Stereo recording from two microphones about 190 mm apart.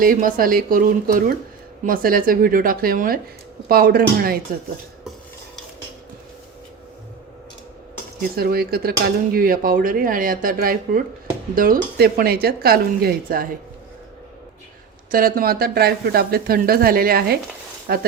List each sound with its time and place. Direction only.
0.0 s speech: 45° right (ahead or behind)
8.4 s speech: 55° right (ahead or behind)
15.1 s speech: 50° right (ahead or behind)